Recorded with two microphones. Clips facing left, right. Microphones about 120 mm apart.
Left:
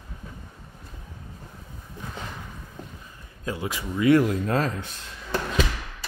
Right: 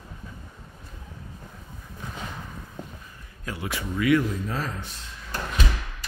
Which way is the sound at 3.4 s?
20° left (ahead or behind).